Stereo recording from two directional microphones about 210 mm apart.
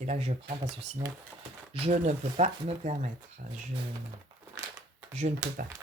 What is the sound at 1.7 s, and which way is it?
Speech, 30° right (ahead or behind).